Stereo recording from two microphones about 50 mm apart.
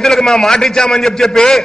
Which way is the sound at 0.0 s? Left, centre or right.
Centre.